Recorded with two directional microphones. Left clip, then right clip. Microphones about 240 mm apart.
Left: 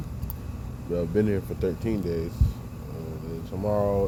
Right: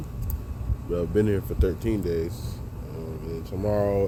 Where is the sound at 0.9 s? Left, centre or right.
Centre.